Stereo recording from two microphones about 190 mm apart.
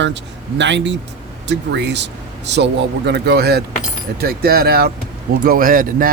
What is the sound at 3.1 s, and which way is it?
Speech, 60° right (ahead or behind).